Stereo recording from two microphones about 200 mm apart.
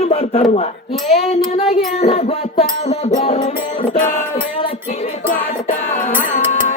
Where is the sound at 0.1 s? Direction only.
30° left (ahead or behind).